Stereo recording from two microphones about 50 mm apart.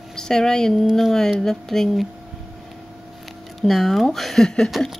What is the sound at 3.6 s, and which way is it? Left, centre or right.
Speech, centre.